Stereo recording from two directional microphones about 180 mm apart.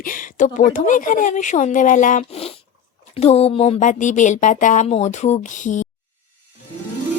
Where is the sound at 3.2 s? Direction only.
35° left (ahead or behind).